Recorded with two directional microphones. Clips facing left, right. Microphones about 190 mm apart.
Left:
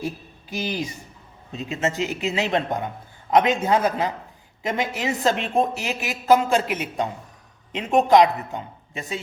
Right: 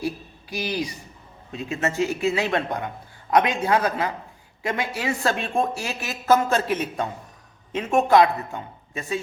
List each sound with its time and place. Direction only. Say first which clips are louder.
0.5 s a man's voice: even; 20° left (ahead or behind)